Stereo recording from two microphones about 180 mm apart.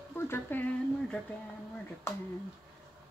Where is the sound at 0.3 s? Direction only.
10° left (ahead or behind).